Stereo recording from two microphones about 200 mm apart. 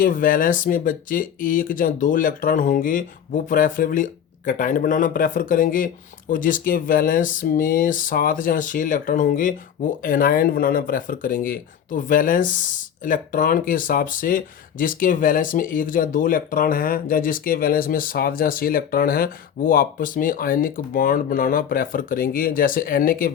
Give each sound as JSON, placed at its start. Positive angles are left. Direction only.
{"t": 0.0, "sound": "speech", "side_deg": 45}